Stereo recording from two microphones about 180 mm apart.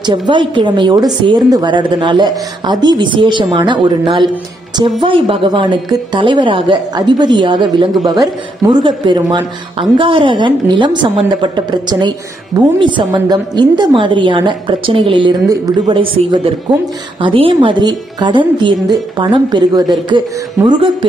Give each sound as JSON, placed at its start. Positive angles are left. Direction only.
{"t": 0.0, "sound": "a woman's voice", "side_deg": -25}